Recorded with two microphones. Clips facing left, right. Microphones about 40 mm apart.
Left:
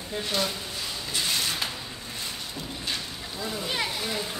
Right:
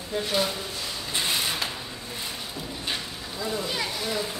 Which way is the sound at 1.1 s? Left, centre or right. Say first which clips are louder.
Right 1 dB; centre.